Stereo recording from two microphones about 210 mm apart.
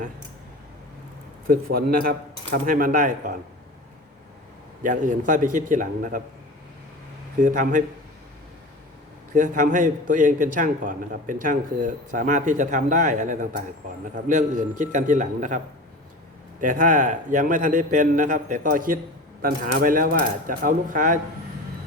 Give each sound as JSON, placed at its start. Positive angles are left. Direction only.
{"t": 1.5, "sound": "speech", "side_deg": -45}
{"t": 4.8, "sound": "a man's voice", "side_deg": -40}
{"t": 7.4, "sound": "a man's voice", "side_deg": -40}
{"t": 9.3, "sound": "a man's voice", "side_deg": -35}